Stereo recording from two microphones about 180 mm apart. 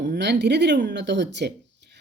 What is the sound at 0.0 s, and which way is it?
Speech, 70° right (ahead or behind).